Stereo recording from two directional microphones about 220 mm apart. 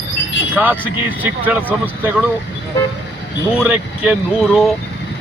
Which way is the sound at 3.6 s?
5° right (ahead or behind).